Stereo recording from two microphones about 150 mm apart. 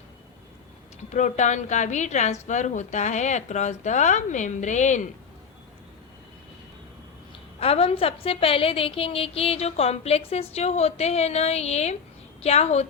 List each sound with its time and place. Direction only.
1.1 s a woman's voice: 55° left (ahead or behind)
7.6 s a woman's voice: 40° left (ahead or behind)